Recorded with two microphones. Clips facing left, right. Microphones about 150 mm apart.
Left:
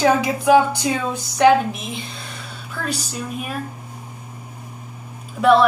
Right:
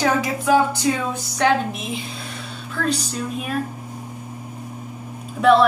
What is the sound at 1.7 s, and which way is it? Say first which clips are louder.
Speech: even; centre (ahead or behind).